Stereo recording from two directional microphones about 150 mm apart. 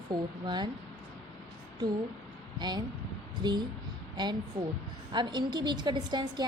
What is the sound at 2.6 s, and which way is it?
A woman's voice, 30° right (ahead or behind).